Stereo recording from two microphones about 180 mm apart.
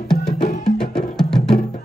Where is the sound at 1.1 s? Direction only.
5° left (ahead or behind).